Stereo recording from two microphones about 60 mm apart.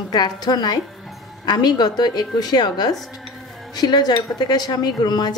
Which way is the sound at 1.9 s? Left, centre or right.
Left.